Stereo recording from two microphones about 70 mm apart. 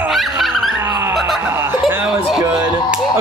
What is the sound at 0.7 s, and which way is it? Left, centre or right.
Skidding, right.